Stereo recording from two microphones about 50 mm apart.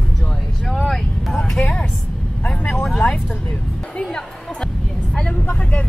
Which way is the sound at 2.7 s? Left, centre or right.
Centre.